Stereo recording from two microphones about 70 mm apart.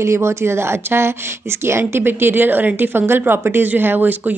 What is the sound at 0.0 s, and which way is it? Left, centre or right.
A woman's voice, right.